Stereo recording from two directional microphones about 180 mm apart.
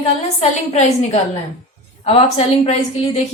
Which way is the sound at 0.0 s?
35° left (ahead or behind).